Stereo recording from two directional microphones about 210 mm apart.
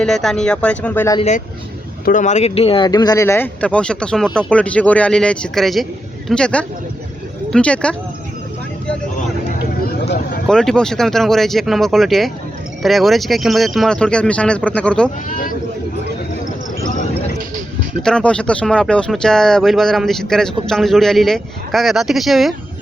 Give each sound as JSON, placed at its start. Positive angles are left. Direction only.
{"t": 0.0, "sound": "speech", "side_deg": 0}
{"t": 2.0, "sound": "speech", "side_deg": 35}
{"t": 10.4, "sound": "speech", "side_deg": 0}
{"t": 15.3, "sound": "speech", "side_deg": 40}
{"t": 18.0, "sound": "speech", "side_deg": 5}